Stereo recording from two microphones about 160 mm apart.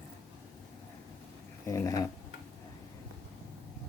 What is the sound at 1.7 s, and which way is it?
Speech, 20° left (ahead or behind).